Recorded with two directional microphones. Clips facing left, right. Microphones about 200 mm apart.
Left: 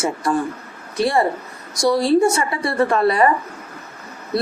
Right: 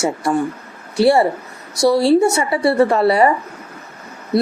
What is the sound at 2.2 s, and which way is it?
Speech, 30° right (ahead or behind).